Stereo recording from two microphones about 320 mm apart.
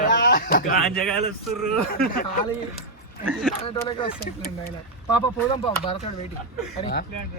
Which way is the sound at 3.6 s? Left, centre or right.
Centre.